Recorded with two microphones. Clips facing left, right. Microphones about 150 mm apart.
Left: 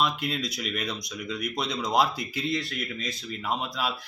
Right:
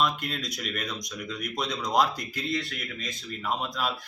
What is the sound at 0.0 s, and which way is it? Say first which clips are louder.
Speech: even; 5° left (ahead or behind).